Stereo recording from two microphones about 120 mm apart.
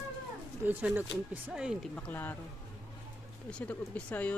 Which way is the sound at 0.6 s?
15° right (ahead or behind).